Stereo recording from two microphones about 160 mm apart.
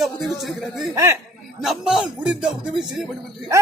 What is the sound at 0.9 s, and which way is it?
Speech, 15° right (ahead or behind).